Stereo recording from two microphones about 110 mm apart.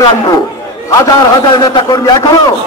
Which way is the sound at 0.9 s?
30° left (ahead or behind).